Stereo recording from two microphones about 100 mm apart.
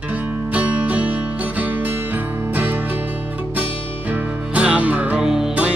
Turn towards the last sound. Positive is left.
turn(degrees=-5)  # may be behind; listen again after turning